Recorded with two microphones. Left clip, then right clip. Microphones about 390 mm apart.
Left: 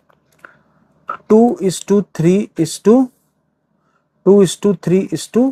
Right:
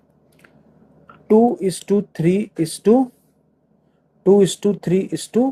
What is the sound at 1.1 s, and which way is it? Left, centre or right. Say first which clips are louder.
Speech: left 3 dB; left.